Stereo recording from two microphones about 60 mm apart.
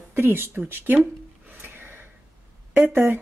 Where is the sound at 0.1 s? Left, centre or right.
Right.